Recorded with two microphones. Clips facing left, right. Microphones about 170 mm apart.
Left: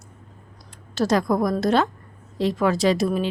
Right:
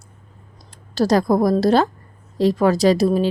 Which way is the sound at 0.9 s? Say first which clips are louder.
Right 4 dB; 35° right (ahead or behind).